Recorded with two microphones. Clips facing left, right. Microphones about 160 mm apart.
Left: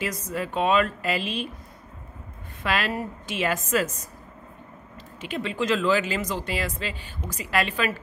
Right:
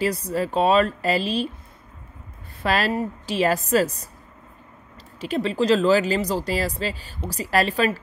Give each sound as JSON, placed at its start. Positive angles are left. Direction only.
{"t": 0.0, "sound": "speech", "side_deg": -35}
{"t": 2.6, "sound": "speech", "side_deg": -35}
{"t": 5.2, "sound": "speech", "side_deg": -35}